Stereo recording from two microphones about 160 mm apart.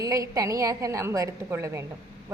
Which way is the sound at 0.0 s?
20° right (ahead or behind).